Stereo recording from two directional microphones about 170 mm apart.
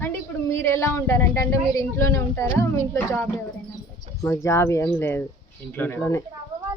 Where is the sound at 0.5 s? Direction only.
15° left (ahead or behind).